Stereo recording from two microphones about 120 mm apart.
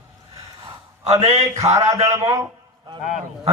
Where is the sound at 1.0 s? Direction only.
60° right (ahead or behind).